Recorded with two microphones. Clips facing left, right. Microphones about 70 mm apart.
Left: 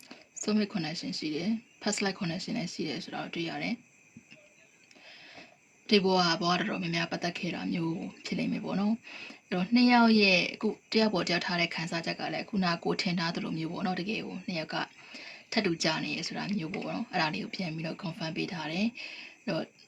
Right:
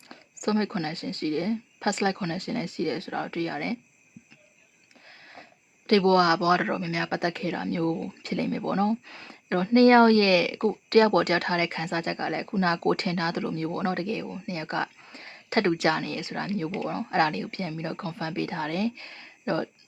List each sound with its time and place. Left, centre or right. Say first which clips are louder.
0.4 s speech: right 4 dB; right
5.0 s a sound: right 4 dB; right
5.9 s speech: right 6 dB; right